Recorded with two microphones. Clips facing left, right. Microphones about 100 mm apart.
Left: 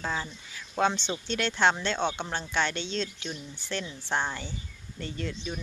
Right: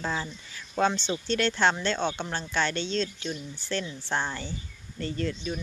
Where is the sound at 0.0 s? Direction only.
Centre (ahead or behind).